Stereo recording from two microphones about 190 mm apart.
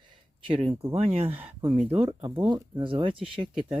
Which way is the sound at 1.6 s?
10° right (ahead or behind).